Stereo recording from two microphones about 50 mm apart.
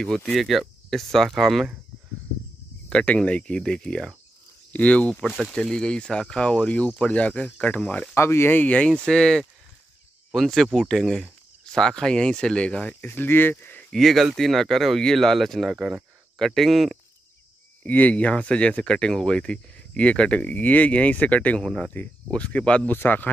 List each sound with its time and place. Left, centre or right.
0.0 s speech: centre
2.9 s speech: centre
5.5 s speech: centre
8.1 s speech: left
8.5 s speech: left
8.7 s speech: left
9.0 s speech: centre
13.0 s speech: left
13.8 s speech: centre
15.7 s speech: centre
16.3 s speech: centre
17.8 s speech: left
21.6 s speech: centre
22.8 s speech: left